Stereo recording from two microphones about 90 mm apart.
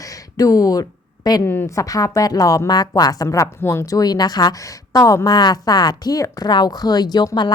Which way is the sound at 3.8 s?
45° left (ahead or behind).